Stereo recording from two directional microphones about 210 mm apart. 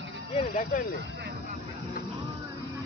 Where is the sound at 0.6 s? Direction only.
40° left (ahead or behind).